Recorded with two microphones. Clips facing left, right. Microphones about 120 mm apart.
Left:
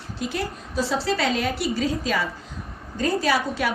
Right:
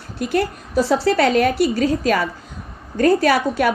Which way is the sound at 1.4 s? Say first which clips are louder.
Right 8 dB; 50° right (ahead or behind).